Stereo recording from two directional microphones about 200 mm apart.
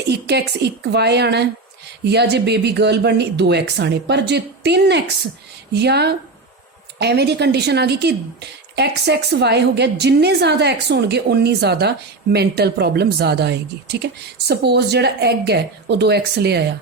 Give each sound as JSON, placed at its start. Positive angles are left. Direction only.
{"t": 0.1, "sound": "a woman's voice", "side_deg": -55}